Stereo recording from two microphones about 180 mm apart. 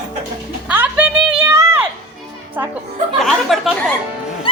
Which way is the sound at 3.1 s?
Centre (ahead or behind).